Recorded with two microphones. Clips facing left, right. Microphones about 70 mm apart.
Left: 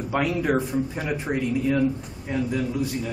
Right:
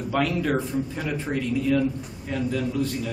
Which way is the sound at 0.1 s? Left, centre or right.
Centre.